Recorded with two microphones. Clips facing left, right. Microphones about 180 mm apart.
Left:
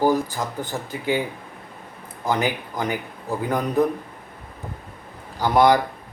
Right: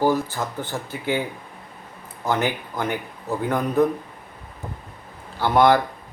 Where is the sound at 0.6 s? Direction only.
15° left (ahead or behind).